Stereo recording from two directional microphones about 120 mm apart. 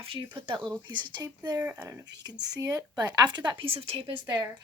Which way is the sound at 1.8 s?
30° right (ahead or behind).